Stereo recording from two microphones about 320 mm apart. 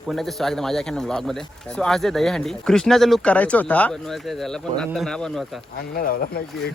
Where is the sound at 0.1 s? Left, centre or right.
Centre.